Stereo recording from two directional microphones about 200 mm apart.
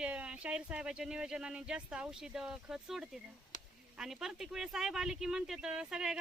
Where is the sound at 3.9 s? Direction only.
Centre (ahead or behind).